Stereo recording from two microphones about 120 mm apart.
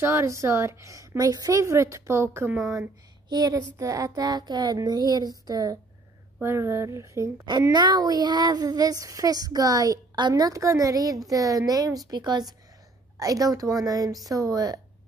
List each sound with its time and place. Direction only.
0.0 s a woman's voice: 20° right (ahead or behind)
2.7 s speech: 30° right (ahead or behind)
6.4 s a woman's voice: 20° right (ahead or behind)
7.7 s speech: 40° right (ahead or behind)